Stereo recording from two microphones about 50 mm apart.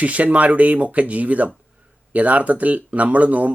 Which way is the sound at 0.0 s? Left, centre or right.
Right.